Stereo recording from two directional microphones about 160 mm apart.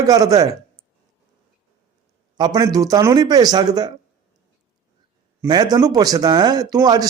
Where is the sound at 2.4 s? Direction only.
25° right (ahead or behind).